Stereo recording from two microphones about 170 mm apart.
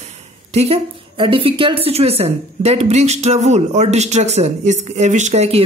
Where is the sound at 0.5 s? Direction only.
35° right (ahead or behind).